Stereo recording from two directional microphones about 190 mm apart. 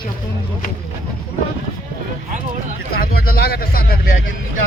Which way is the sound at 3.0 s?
55° left (ahead or behind).